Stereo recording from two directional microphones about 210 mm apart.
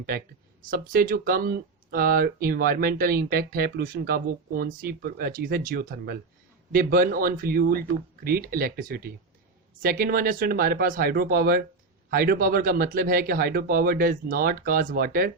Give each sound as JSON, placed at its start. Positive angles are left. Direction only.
{"t": 0.7, "sound": "speech", "side_deg": -45}